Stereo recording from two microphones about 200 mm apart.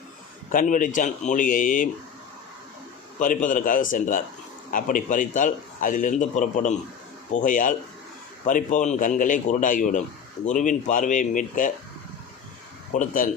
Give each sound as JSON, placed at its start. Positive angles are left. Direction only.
{"t": 0.5, "sound": "a man's voice", "side_deg": 40}
{"t": 3.2, "sound": "a man's voice", "side_deg": 40}
{"t": 12.9, "sound": "a man's voice", "side_deg": 40}